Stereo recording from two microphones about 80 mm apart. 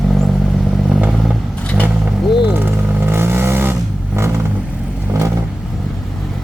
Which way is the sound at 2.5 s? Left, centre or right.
Right.